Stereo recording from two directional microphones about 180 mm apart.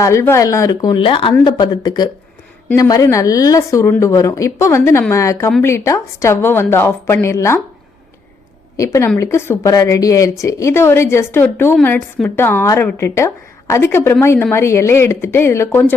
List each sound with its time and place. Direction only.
0.0 s speech: 15° left (ahead or behind)
8.7 s speech: 15° left (ahead or behind)